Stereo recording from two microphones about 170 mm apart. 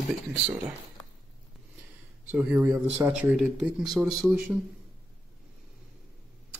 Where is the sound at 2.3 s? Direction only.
5° right (ahead or behind).